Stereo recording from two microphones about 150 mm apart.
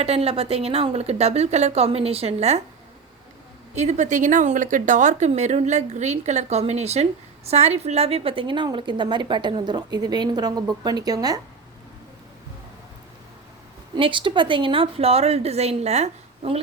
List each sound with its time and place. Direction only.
0.0 s speech: 45° right (ahead or behind)
3.8 s speech: 50° right (ahead or behind); by 11.3 s 25° right (ahead or behind)
13.9 s a woman's voice: 35° right (ahead or behind)